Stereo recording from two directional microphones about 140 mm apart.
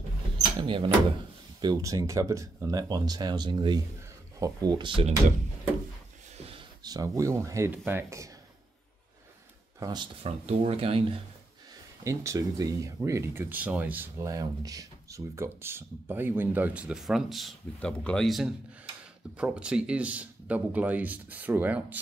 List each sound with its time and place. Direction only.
0.6 s speech: 35° right (ahead or behind)
1.6 s speech: 25° right (ahead or behind)
6.3 s a sound: 45° right (ahead or behind)
6.8 s speech: 30° right (ahead or behind)
9.8 s speech: 30° right (ahead or behind)
12.0 s speech: 20° right (ahead or behind)